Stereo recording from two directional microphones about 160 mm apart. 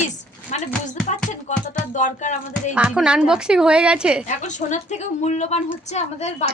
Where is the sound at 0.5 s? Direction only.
50° left (ahead or behind).